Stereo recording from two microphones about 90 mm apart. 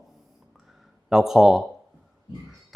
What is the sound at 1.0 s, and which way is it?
Speech, 5° right (ahead or behind).